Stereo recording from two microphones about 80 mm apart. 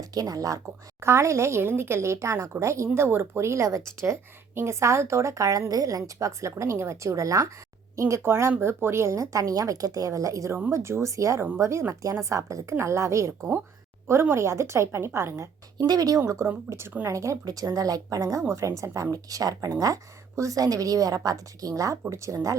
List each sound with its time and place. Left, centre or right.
0.0 s a woman's voice: right
0.9 s a woman's voice: right
15.9 s a woman's voice: right
16.2 s a woman's voice: right